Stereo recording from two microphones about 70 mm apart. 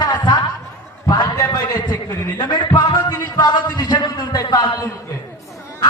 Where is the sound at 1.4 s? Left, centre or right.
Left.